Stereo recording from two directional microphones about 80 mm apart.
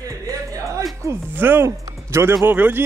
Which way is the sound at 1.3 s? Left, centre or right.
Right.